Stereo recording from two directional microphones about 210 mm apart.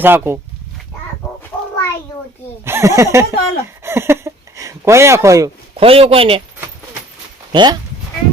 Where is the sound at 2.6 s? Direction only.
10° right (ahead or behind).